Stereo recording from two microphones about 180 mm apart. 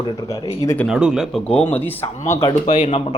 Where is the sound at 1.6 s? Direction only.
10° left (ahead or behind).